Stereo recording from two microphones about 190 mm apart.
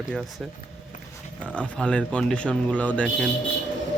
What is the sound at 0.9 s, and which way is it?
Dog, 40° left (ahead or behind).